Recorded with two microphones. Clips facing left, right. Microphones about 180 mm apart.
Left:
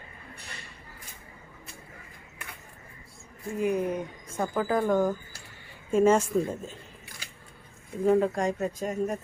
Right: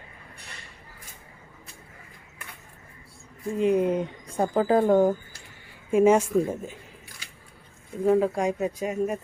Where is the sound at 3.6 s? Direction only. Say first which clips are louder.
Right 5 dB; 25° right (ahead or behind).